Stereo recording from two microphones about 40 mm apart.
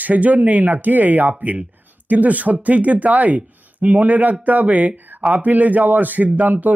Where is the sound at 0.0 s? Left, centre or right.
Right.